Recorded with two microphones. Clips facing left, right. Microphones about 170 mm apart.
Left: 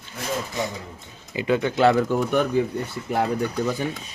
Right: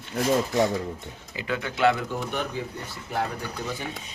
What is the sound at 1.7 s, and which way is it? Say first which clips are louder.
Speech: left 3 dB; 35° left (ahead or behind).